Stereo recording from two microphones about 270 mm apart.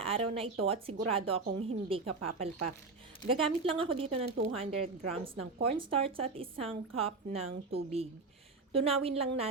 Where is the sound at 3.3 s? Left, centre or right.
Centre.